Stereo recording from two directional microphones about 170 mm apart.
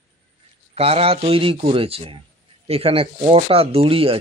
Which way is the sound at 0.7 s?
35° right (ahead or behind).